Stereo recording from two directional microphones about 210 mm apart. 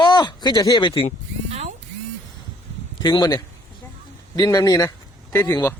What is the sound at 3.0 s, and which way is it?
Speech, 20° left (ahead or behind).